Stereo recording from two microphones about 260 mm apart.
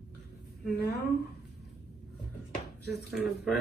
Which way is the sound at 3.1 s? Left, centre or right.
Centre.